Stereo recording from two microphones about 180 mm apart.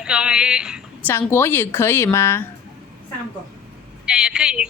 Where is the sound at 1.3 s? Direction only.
10° left (ahead or behind).